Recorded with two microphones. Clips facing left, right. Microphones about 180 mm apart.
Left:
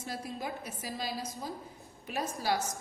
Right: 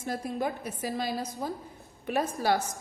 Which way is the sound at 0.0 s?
55° right (ahead or behind).